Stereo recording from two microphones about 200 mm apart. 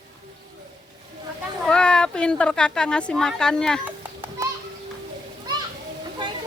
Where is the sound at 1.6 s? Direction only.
5° left (ahead or behind).